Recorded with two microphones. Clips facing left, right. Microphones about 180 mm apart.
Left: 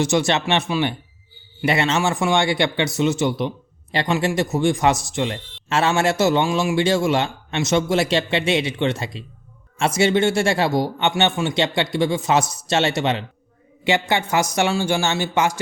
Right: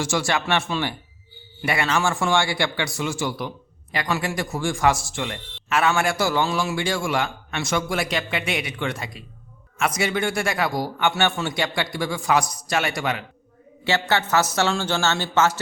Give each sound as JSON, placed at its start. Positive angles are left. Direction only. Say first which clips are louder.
{"t": 0.0, "sound": "a man's voice", "louder": "left 5 dB", "side_deg": 20}